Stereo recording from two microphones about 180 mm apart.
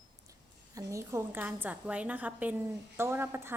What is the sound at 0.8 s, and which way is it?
A woman's voice, 15° right (ahead or behind).